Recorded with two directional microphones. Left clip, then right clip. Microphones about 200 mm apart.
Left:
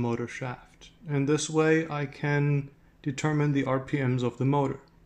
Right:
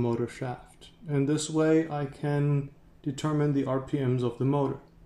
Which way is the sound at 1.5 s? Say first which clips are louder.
Right 1 dB; 50° left (ahead or behind).